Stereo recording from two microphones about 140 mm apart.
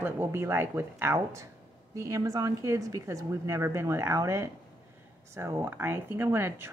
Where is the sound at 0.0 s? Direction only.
20° right (ahead or behind).